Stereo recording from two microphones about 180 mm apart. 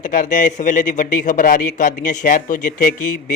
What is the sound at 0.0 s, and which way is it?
A man's voice, 45° left (ahead or behind).